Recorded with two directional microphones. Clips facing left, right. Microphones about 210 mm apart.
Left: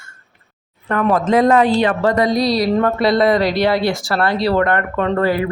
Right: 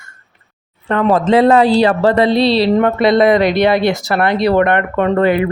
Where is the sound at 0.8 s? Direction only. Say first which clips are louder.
Right 3 dB; 30° right (ahead or behind).